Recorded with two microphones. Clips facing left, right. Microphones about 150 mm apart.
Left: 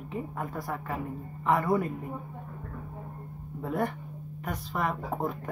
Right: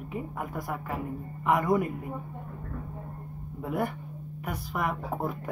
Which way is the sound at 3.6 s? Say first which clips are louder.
Even; 10° right (ahead or behind).